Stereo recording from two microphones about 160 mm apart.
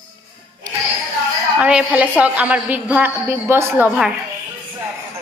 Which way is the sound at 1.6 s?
5° right (ahead or behind).